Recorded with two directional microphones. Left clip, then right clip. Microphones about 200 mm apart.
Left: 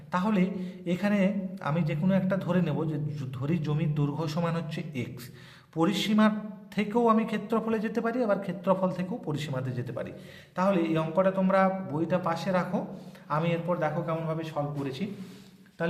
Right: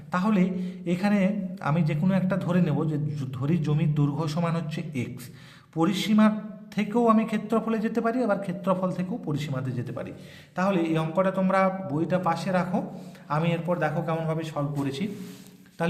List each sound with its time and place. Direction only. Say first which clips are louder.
0.1 s a man's voice: right 2 dB; 10° right (ahead or behind)